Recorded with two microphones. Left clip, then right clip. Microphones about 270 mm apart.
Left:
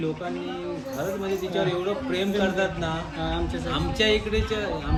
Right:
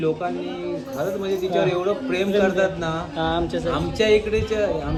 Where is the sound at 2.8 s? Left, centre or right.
Centre.